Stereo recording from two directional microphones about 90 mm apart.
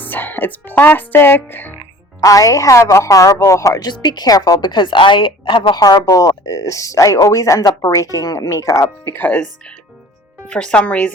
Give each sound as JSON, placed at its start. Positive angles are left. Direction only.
{"t": 0.0, "sound": "speech", "side_deg": 20}
{"t": 2.2, "sound": "speech", "side_deg": 40}
{"t": 3.8, "sound": "speech", "side_deg": 55}
{"t": 4.7, "sound": "speech", "side_deg": 60}
{"t": 5.8, "sound": "speech", "side_deg": 45}